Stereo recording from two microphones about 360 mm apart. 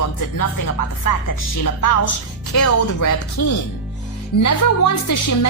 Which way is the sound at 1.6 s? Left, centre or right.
Left.